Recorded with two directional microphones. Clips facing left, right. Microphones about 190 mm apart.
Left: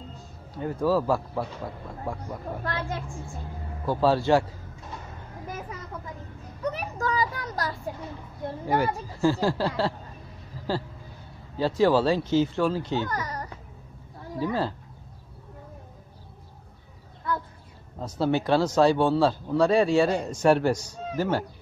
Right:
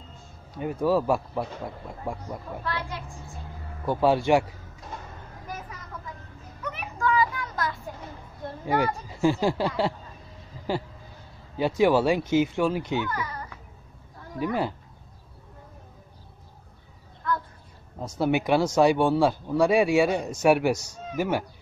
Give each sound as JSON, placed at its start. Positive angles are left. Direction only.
{"t": 0.6, "sound": "speech", "side_deg": -15}
{"t": 2.6, "sound": "a child's voice", "side_deg": 45}
{"t": 3.8, "sound": "speech", "side_deg": -15}
{"t": 6.6, "sound": "a sound", "side_deg": 40}
{"t": 8.6, "sound": "speech", "side_deg": -20}
{"t": 11.5, "sound": "speech", "side_deg": -15}
{"t": 13.1, "sound": "speech", "side_deg": 40}
{"t": 14.4, "sound": "speech", "side_deg": -15}
{"t": 17.9, "sound": "speech", "side_deg": -10}